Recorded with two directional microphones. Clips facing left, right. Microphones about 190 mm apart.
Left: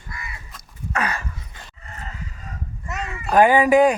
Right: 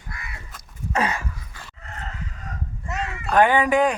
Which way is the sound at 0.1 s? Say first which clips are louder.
Left 6 dB; 60° right (ahead or behind).